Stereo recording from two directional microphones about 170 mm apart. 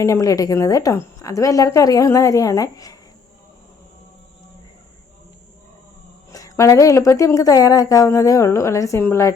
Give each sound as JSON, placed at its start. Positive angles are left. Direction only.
{"t": 0.0, "sound": "speech", "side_deg": 20}
{"t": 6.3, "sound": "speech", "side_deg": 20}